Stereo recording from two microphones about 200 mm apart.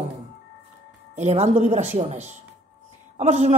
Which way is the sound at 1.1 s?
35° right (ahead or behind).